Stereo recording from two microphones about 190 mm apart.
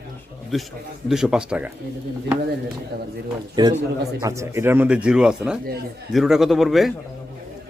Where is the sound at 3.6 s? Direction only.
20° right (ahead or behind).